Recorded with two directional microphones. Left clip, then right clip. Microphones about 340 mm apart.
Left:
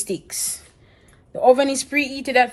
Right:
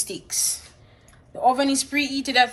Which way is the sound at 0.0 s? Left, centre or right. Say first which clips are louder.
Even; left.